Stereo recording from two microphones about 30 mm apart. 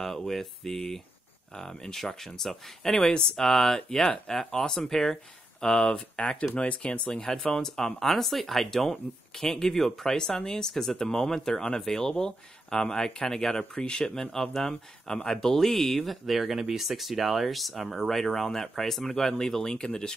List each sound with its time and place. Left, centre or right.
0.0 s speech: centre
3.1 s speech: left
3.4 s speech: centre; by 7.0 s left
7.1 s speech: left
7.7 s speech: centre
13.7 s speech: left
14.1 s speech: centre
16.3 s speech: centre
18.1 s speech: centre